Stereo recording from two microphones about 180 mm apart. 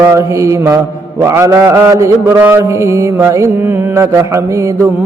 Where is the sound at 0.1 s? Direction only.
15° right (ahead or behind).